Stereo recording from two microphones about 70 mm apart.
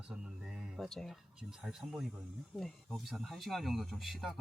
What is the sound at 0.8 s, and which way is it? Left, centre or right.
Speech, centre.